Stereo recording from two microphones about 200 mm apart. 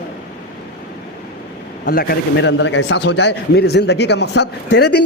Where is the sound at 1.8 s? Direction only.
45° left (ahead or behind).